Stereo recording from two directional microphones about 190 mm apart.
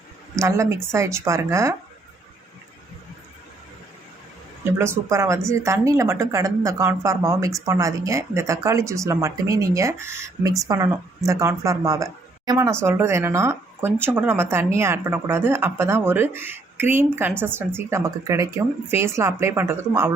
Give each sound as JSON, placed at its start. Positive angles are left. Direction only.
{"t": 0.3, "sound": "speech", "side_deg": -15}
{"t": 4.8, "sound": "speech", "side_deg": -15}